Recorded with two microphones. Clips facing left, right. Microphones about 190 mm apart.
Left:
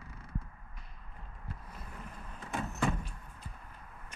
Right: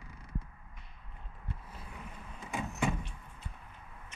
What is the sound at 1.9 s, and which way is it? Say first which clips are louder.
Vehicle: even; centre (ahead or behind).